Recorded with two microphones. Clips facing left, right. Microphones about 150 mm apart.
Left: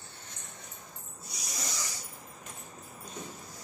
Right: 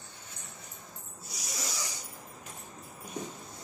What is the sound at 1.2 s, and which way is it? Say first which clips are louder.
Snake: right 1 dB; centre (ahead or behind).